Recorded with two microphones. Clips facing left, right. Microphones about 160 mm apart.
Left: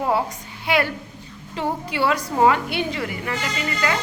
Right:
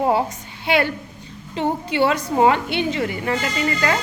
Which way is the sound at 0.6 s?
25° right (ahead or behind).